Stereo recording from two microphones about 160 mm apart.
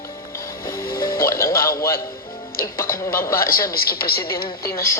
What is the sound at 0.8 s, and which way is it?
Music, 65° left (ahead or behind).